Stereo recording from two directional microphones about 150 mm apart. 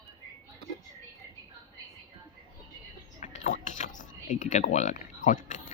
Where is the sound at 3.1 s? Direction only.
55° left (ahead or behind).